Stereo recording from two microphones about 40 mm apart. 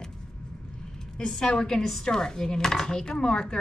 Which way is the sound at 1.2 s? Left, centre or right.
Centre.